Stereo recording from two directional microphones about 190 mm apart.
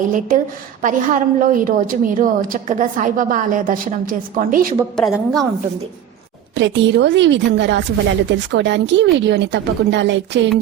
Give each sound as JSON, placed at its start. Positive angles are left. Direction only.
{"t": 0.1, "sound": "a woman's voice", "side_deg": -45}
{"t": 4.9, "sound": "a woman's voice", "side_deg": 0}
{"t": 6.6, "sound": "a woman's voice", "side_deg": -70}